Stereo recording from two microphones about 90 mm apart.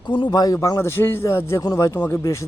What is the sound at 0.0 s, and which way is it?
Speech, 60° left (ahead or behind).